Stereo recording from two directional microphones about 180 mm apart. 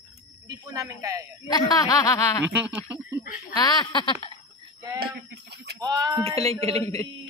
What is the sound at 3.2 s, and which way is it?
Speech, 50° left (ahead or behind).